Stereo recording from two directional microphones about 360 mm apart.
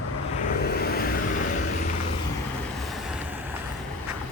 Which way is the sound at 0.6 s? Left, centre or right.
Left.